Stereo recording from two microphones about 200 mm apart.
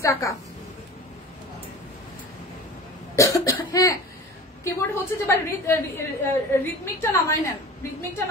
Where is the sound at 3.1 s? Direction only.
15° left (ahead or behind).